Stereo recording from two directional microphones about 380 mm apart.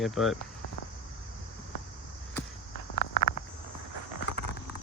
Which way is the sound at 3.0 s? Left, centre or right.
Left.